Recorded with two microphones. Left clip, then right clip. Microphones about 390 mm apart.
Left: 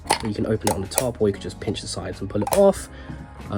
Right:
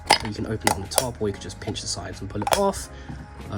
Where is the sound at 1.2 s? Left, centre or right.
Left.